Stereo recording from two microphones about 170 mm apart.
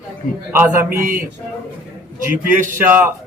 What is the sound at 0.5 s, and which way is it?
Speech, 15° right (ahead or behind).